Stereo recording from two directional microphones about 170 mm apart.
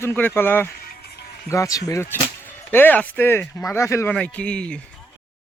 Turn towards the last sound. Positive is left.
turn(degrees=5)  # may be behind; listen again after turning